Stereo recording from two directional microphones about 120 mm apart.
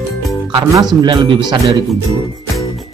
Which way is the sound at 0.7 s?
35° right (ahead or behind).